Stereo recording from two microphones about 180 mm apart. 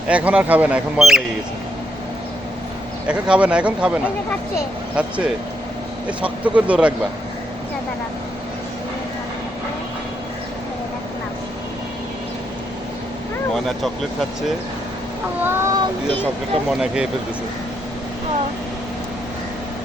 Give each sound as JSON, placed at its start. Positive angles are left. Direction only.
{"t": 0.1, "sound": "speech", "side_deg": -5}
{"t": 3.1, "sound": "speech", "side_deg": -5}
{"t": 4.9, "sound": "speech", "side_deg": -5}
{"t": 13.5, "sound": "speech", "side_deg": 0}
{"t": 15.4, "sound": "speech", "side_deg": -15}
{"t": 16.7, "sound": "speech", "side_deg": -5}